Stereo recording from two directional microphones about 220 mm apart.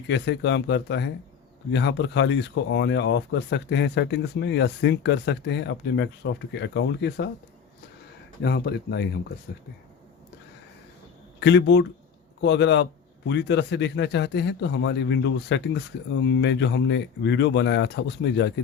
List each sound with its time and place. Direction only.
0.1 s speech: 50° left (ahead or behind)
8.4 s speech: 50° left (ahead or behind)
11.3 s speech: 50° left (ahead or behind)